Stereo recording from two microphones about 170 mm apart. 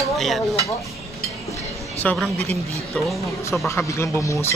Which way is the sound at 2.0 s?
Centre (ahead or behind).